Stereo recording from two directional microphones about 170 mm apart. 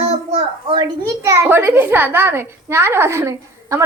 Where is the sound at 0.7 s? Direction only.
20° right (ahead or behind).